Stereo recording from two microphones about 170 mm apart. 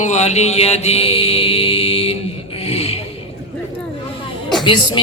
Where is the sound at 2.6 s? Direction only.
35° left (ahead or behind).